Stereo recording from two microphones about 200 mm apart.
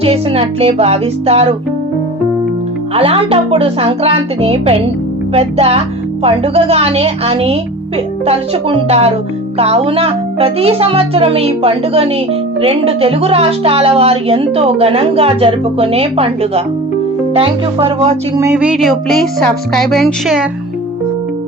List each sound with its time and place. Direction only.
0.0 s a child's voice: 30° right (ahead or behind)
2.9 s a child's voice: 30° right (ahead or behind)
18.3 s speech: 10° right (ahead or behind)